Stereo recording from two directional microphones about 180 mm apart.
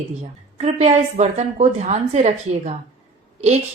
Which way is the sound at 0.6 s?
40° right (ahead or behind).